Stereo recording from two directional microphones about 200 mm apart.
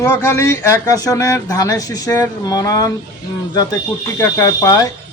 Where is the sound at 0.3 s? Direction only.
15° left (ahead or behind).